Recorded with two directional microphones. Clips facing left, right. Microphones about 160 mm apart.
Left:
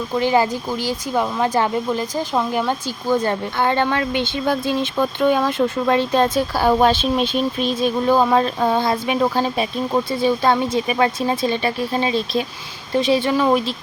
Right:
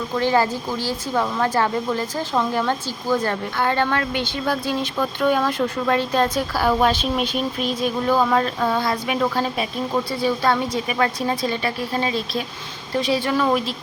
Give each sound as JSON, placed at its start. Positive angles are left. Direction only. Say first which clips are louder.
{"t": 0.2, "sound": "a woman's voice", "louder": "left 2 dB", "side_deg": 15}